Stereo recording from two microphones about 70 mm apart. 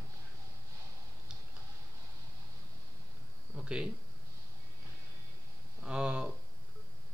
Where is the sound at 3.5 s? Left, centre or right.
Centre.